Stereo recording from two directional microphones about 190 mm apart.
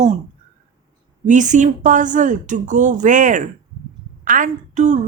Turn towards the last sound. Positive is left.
turn(degrees=-40)  # may be behind; listen again after turning